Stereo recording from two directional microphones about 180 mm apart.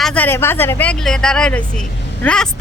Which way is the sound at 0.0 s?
10° left (ahead or behind).